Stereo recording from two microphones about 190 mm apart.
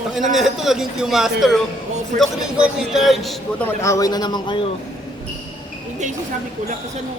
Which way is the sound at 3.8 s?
15° left (ahead or behind).